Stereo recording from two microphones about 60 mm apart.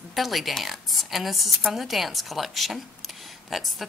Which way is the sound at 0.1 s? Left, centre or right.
Centre.